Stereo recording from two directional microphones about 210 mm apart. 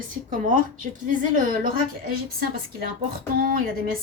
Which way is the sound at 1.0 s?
40° right (ahead or behind).